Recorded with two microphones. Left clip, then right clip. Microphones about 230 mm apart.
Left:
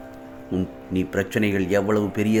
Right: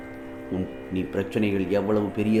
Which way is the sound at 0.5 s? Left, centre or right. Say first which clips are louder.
Left 4 dB; left.